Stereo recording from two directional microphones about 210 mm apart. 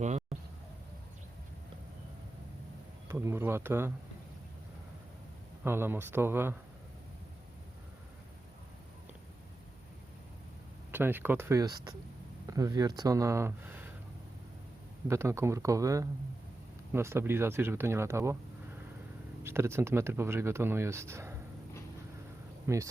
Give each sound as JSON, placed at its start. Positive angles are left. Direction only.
{"t": 0.0, "sound": "speech", "side_deg": -30}
{"t": 3.1, "sound": "speech", "side_deg": -10}
{"t": 5.6, "sound": "speech", "side_deg": -10}
{"t": 10.9, "sound": "speech", "side_deg": -10}
{"t": 15.0, "sound": "speech", "side_deg": -10}
{"t": 19.4, "sound": "speech", "side_deg": -10}
{"t": 22.6, "sound": "speech", "side_deg": -15}